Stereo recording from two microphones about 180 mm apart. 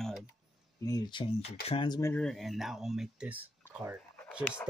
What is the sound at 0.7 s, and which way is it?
Speech, 20° left (ahead or behind).